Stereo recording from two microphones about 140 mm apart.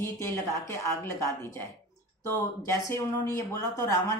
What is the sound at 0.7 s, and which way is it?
Speech, 20° left (ahead or behind).